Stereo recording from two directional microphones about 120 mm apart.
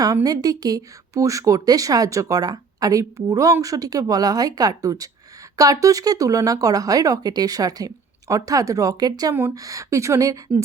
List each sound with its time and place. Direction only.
0.0 s speech: 30° right (ahead or behind)